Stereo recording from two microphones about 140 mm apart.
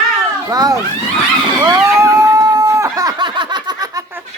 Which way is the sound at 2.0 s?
20° right (ahead or behind).